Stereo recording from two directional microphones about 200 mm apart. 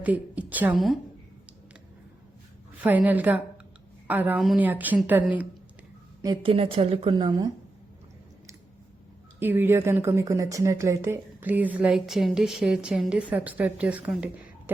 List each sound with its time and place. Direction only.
0.0 s a woman's voice: 5° right (ahead or behind)
2.8 s speech: 10° right (ahead or behind)
6.2 s a woman's voice: 25° right (ahead or behind)
9.4 s speech: 10° right (ahead or behind)